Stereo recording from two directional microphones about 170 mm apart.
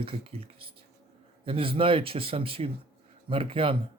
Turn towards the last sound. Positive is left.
turn(degrees=-30)  # may be behind; listen again after turning